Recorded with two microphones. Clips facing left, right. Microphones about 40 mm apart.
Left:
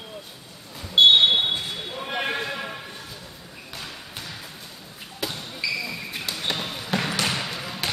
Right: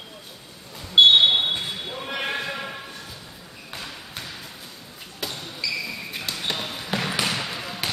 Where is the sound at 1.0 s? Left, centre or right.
Centre.